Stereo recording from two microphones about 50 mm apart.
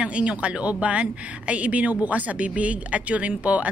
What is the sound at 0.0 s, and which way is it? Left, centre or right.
A woman's voice, right.